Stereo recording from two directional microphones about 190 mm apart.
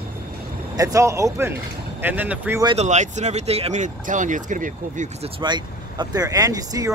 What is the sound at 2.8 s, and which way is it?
Speech, 40° right (ahead or behind).